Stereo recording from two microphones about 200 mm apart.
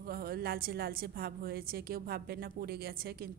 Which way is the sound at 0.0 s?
50° right (ahead or behind).